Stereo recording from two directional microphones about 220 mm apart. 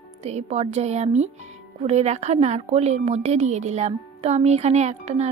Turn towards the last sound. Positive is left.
turn(degrees=-30)  # may be behind; listen again after turning